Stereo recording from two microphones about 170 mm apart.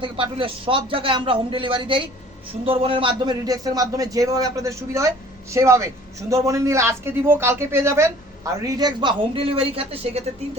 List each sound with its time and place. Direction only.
0.0 s a man's voice: 30° right (ahead or behind)